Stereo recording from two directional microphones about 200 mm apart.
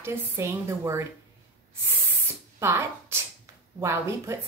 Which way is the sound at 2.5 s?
15° right (ahead or behind).